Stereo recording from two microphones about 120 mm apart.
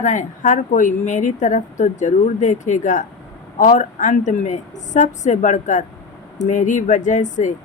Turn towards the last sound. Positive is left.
turn(degrees=90)